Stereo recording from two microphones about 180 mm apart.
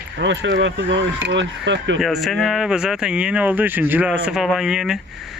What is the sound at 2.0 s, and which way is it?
Speech, centre (ahead or behind).